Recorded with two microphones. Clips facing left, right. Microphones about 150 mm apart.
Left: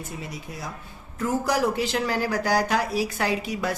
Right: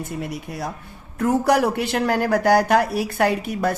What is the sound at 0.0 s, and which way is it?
Speech, 60° right (ahead or behind).